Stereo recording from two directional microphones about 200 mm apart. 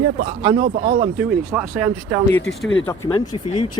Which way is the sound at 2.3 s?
5° left (ahead or behind).